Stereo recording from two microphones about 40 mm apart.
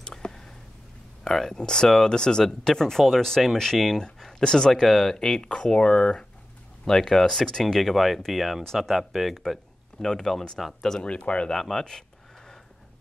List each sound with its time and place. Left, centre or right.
0.0 s a sound: centre
1.5 s speech: centre
4.8 s speech: centre
5.1 s speech: centre
11.1 s speech: left
11.5 s speech: centre